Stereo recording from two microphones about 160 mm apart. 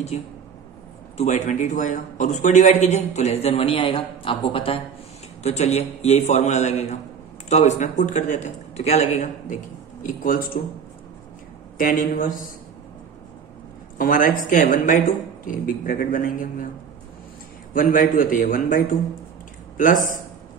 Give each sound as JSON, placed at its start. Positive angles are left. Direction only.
{"t": 0.1, "sound": "a man's voice", "side_deg": 45}
{"t": 10.0, "sound": "a woman's voice", "side_deg": 60}
{"t": 11.8, "sound": "a woman's voice", "side_deg": 60}
{"t": 13.9, "sound": "a woman's voice", "side_deg": 55}
{"t": 17.7, "sound": "a woman's voice", "side_deg": 55}